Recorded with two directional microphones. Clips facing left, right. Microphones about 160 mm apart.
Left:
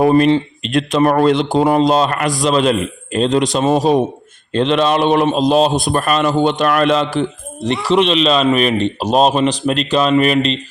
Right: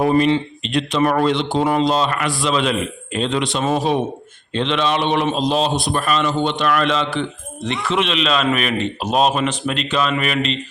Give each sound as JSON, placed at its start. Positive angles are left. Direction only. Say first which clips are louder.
{"t": 0.1, "sound": "a man's voice", "louder": "left 4 dB", "side_deg": 45}